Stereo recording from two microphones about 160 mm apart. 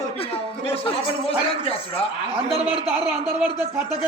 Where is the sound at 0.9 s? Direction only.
35° left (ahead or behind).